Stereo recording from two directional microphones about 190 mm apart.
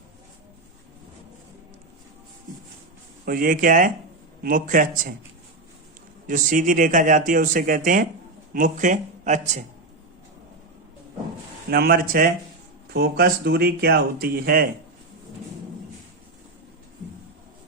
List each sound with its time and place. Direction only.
3.2 s speech: 45° right (ahead or behind)
6.2 s speech: 45° right (ahead or behind)
11.7 s speech: 55° right (ahead or behind)